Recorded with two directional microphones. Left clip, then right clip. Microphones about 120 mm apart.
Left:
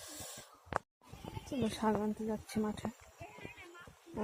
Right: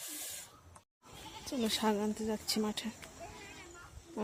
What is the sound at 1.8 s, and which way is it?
Speech, 30° right (ahead or behind).